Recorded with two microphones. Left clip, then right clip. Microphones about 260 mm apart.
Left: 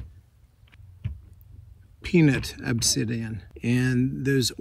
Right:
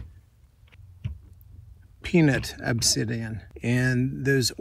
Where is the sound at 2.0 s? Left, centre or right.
Centre.